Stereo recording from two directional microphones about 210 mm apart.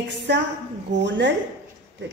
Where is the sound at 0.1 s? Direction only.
55° right (ahead or behind).